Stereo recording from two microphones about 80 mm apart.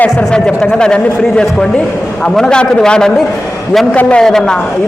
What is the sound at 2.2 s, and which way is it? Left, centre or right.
Speech, centre.